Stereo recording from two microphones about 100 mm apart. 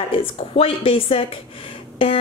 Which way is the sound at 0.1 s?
65° left (ahead or behind).